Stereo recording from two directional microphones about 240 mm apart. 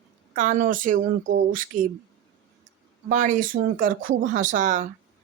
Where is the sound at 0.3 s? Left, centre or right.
Right.